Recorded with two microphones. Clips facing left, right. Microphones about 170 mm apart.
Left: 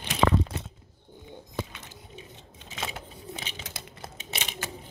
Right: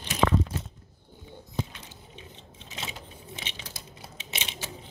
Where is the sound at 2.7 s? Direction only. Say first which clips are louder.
Left 3 dB; 50° left (ahead or behind).